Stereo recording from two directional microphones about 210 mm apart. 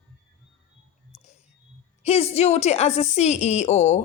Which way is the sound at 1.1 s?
35° left (ahead or behind).